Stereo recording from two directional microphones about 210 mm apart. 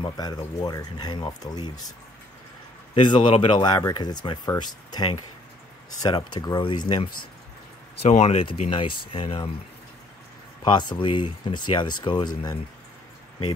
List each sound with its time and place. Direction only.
0.0 s a man's voice: 20° left (ahead or behind)
6.4 s speech: 20° left (ahead or behind)
8.0 s speech: 30° left (ahead or behind)
10.6 s speech: 20° left (ahead or behind)